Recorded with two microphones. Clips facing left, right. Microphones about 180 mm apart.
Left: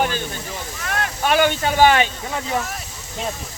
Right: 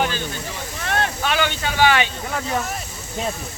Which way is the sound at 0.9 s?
30° right (ahead or behind).